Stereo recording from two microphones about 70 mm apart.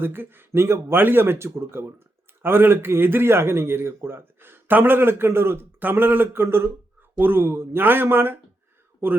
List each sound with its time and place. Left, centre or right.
0.0 s speech: right